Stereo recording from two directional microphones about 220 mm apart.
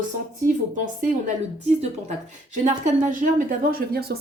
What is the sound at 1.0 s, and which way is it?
Speech, 35° right (ahead or behind).